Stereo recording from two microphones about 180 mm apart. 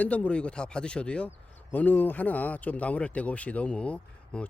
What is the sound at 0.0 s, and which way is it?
Speech, 10° left (ahead or behind).